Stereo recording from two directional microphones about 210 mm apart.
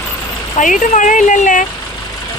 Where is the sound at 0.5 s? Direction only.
40° left (ahead or behind).